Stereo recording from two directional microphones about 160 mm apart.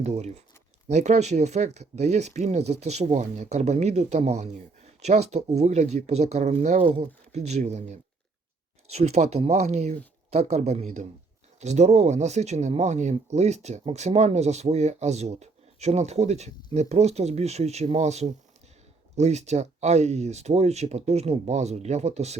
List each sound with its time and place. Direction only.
0.0 s speech: 45° right (ahead or behind)